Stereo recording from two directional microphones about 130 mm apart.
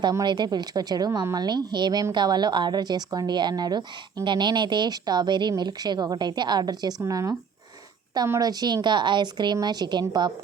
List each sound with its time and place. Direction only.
0.0 s a woman's voice: 30° right (ahead or behind)